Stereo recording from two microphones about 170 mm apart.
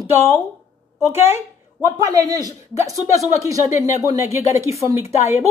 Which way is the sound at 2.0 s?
20° right (ahead or behind).